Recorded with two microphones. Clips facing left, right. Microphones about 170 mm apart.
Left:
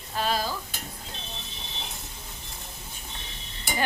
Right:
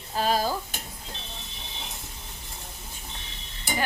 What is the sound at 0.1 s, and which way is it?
Stir, 40° right (ahead or behind).